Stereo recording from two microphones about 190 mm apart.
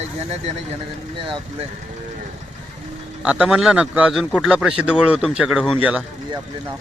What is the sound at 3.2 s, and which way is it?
A man's voice, 5° right (ahead or behind).